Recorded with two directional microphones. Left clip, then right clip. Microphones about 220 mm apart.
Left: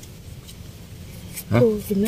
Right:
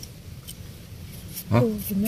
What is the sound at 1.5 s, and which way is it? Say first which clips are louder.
Speech: left 4 dB; 5° left (ahead or behind).